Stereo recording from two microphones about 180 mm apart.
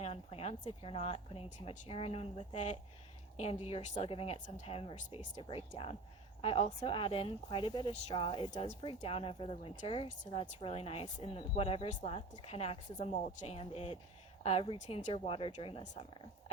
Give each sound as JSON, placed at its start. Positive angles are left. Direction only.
{"t": 0.0, "sound": "a woman's voice", "side_deg": 35}
{"t": 8.5, "sound": "speech", "side_deg": 40}
{"t": 8.8, "sound": "speech", "side_deg": 30}